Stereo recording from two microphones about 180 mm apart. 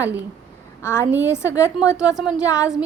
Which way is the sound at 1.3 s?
15° left (ahead or behind).